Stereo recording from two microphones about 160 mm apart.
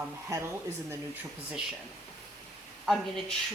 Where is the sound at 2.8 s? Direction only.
Centre (ahead or behind).